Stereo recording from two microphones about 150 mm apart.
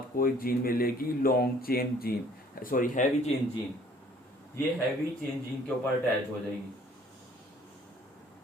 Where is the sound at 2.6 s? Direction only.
65° left (ahead or behind).